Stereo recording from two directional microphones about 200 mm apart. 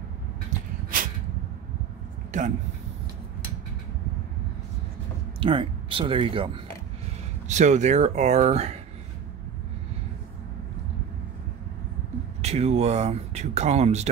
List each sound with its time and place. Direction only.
0.5 s a sound: 45° right (ahead or behind)
5.4 s speech: 25° right (ahead or behind)
7.4 s speech: 35° right (ahead or behind)
12.4 s speech: 35° right (ahead or behind)